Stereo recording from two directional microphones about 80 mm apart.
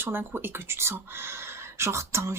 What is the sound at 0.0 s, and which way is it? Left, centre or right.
Speech, right.